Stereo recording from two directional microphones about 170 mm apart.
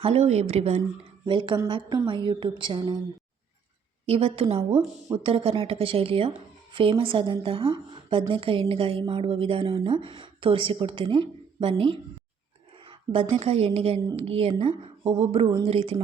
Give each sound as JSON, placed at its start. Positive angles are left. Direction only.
{"t": 0.0, "sound": "a woman's voice", "side_deg": -40}
{"t": 4.0, "sound": "a woman's voice", "side_deg": -35}